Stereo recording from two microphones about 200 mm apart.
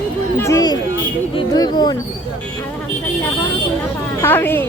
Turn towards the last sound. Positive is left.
turn(degrees=10)  # may be behind; listen again after turning